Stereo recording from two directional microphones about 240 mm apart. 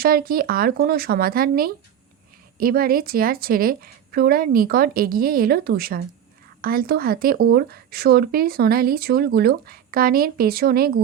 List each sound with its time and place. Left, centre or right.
0.0 s speech: right